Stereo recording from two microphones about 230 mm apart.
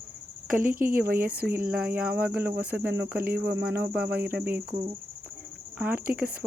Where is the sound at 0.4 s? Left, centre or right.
Right.